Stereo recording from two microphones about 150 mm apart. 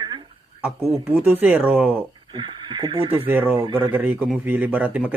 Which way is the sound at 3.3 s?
15° right (ahead or behind).